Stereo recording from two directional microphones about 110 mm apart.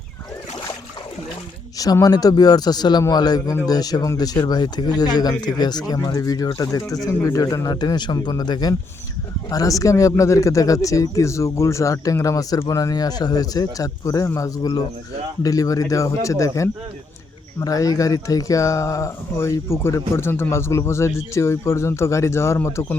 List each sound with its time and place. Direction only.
1.8 s speech: 35° left (ahead or behind)